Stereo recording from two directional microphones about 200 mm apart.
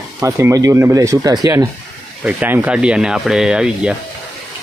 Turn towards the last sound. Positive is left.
turn(degrees=-5)  # may be behind; listen again after turning